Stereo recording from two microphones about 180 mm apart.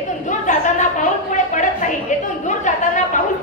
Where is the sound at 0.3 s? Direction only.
40° left (ahead or behind).